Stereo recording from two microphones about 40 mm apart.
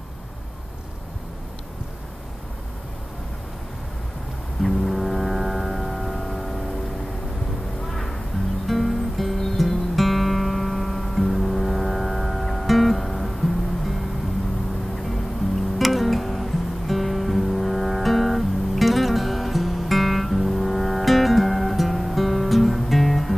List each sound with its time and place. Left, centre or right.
4.6 s foghorn: centre
7.9 s music: centre
15.8 s music: centre